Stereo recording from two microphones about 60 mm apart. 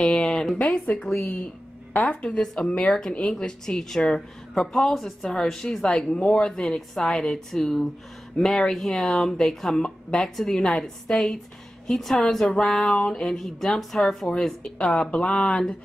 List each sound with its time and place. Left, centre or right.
0.0 s a sound: centre
0.6 s speech: left
2.2 s a woman's voice: centre